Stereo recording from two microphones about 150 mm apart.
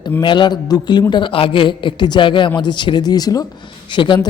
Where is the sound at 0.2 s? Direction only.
30° left (ahead or behind).